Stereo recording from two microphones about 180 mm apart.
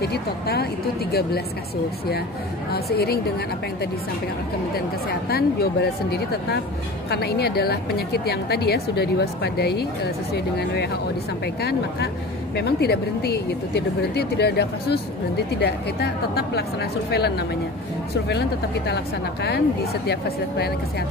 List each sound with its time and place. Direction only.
0.0 s speech: 65° left (ahead or behind)
2.7 s speech: 60° left (ahead or behind)
5.3 s speech: 60° left (ahead or behind)
19.4 s speech: 65° left (ahead or behind)